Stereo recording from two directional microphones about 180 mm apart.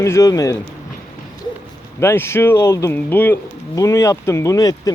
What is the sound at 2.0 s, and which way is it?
Speech, 15° left (ahead or behind).